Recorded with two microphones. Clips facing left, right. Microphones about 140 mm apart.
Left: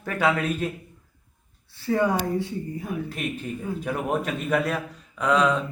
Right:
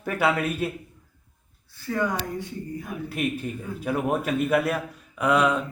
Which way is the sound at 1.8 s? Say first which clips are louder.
Left 4 dB; 25° left (ahead or behind).